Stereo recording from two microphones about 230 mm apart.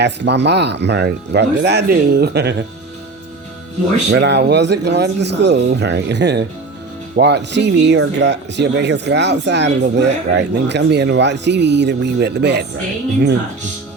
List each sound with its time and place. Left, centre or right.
0.0 s speech: right
4.1 s speech: right